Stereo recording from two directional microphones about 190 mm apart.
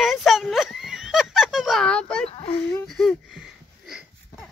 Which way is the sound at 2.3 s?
30° left (ahead or behind).